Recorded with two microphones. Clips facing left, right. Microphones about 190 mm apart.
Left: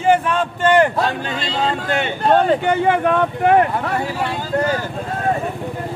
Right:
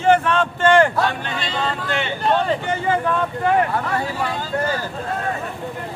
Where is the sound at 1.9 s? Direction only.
50° left (ahead or behind); by 3.5 s 65° left (ahead or behind).